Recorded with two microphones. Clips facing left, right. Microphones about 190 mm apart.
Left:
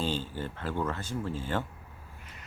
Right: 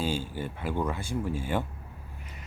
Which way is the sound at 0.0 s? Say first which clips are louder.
Right 2 dB; 10° right (ahead or behind).